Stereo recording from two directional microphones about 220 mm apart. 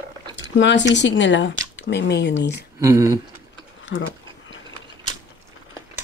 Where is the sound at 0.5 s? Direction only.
55° left (ahead or behind).